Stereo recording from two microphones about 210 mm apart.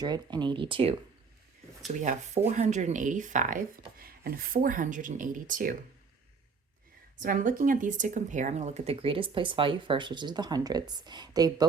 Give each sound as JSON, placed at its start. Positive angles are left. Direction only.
{"t": 0.0, "sound": "speech", "side_deg": -20}
{"t": 1.9, "sound": "speech", "side_deg": -35}
{"t": 7.2, "sound": "speech", "side_deg": -40}